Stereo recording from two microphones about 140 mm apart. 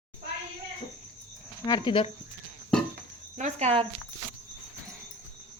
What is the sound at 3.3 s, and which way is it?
Speech, 55° right (ahead or behind).